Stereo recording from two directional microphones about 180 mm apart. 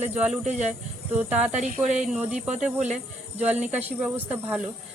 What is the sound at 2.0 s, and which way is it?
Speech, 5° right (ahead or behind).